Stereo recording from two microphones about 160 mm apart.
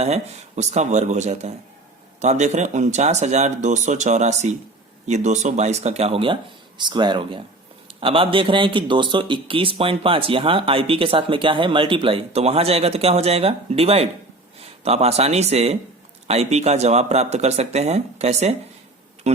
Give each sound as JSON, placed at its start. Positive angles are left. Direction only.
{"t": 0.0, "sound": "speech", "side_deg": -45}